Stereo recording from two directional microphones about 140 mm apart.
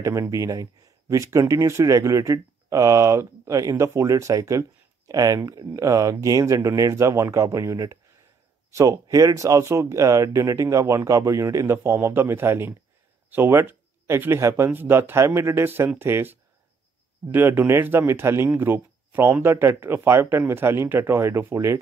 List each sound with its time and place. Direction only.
0.0 s speech: 25° right (ahead or behind)